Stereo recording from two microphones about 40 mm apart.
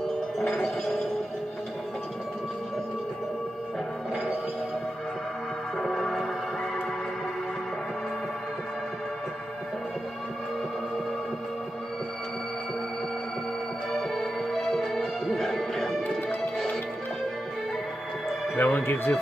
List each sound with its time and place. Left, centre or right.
0.0 s a sound: centre
5.8 s music: centre
13.9 s music: centre
18.6 s speech: left